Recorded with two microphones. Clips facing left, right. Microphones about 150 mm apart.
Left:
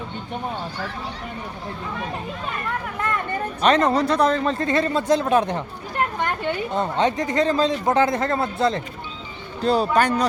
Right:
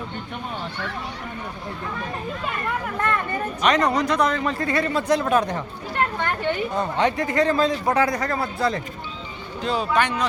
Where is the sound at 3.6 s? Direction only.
30° left (ahead or behind).